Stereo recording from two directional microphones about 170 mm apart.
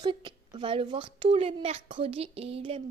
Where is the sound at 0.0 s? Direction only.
25° right (ahead or behind).